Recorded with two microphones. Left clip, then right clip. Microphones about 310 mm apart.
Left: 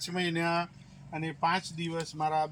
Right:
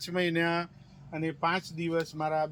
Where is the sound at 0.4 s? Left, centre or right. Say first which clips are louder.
Even; centre.